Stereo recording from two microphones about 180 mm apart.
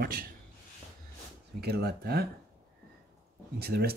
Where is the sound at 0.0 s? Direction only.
55° right (ahead or behind).